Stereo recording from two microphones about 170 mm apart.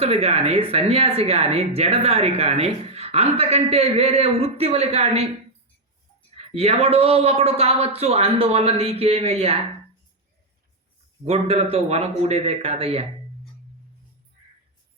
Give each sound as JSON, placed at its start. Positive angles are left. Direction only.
{"t": 0.0, "sound": "speech", "side_deg": -35}
{"t": 6.3, "sound": "speech", "side_deg": -35}
{"t": 11.3, "sound": "speech", "side_deg": -35}